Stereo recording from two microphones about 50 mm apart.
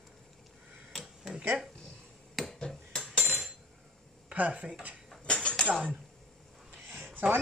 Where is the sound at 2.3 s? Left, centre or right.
Centre.